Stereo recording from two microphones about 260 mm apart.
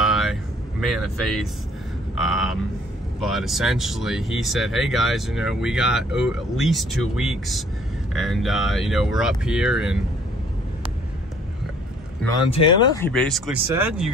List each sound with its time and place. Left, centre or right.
0.0 s vehicle: centre
2.1 s speech: centre
12.4 s speech: left
13.0 s speech: centre